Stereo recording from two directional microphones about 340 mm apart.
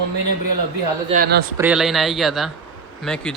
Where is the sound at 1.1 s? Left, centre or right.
Right.